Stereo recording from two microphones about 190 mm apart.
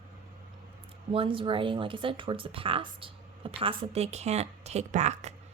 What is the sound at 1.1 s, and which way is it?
A woman's voice, 30° right (ahead or behind).